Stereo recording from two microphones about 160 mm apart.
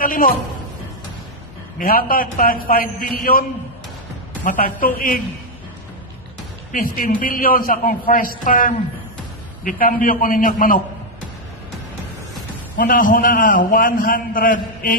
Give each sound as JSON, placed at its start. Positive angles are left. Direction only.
{"t": 0.0, "sound": "a man's voice", "side_deg": 60}
{"t": 1.8, "sound": "a man's voice", "side_deg": 65}
{"t": 4.5, "sound": "a man's voice", "side_deg": 60}
{"t": 6.7, "sound": "a man's voice", "side_deg": 60}
{"t": 12.7, "sound": "a man's voice", "side_deg": 60}